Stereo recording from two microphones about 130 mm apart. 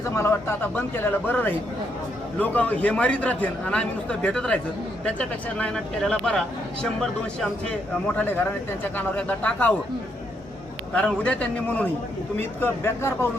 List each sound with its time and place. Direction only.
0.1 s a man's voice: 20° left (ahead or behind)
8.0 s a man's voice: 15° left (ahead or behind)
10.9 s a man's voice: 10° left (ahead or behind)